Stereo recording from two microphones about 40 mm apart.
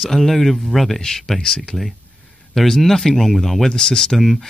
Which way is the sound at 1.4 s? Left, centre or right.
Centre.